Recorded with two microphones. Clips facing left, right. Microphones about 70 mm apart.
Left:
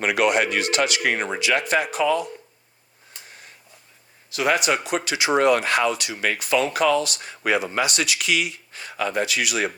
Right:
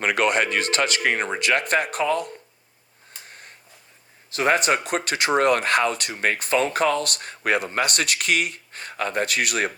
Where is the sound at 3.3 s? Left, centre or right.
Right.